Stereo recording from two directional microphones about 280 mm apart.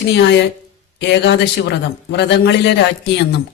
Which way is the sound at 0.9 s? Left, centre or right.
Left.